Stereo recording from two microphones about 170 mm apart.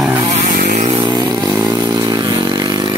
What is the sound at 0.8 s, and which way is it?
Chainsaw, 25° right (ahead or behind).